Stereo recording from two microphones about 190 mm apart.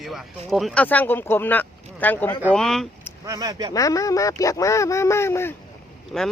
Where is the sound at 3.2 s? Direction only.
20° right (ahead or behind).